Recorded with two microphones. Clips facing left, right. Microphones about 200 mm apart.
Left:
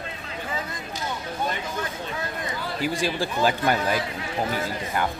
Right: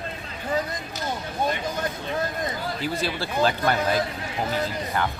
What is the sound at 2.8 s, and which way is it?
Speech, 15° left (ahead or behind).